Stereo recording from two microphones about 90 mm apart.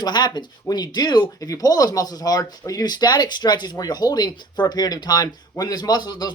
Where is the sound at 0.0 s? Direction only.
50° left (ahead or behind).